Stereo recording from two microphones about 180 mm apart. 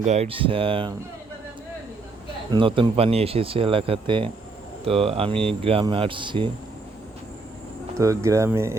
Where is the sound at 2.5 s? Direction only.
25° right (ahead or behind).